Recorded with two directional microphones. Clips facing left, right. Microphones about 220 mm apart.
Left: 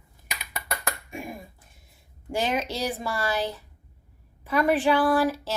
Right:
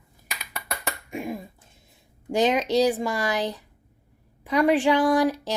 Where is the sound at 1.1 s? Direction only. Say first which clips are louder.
Right 5 dB; 20° right (ahead or behind).